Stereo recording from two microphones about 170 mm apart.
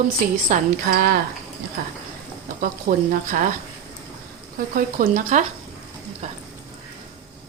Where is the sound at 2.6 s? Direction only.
55° right (ahead or behind).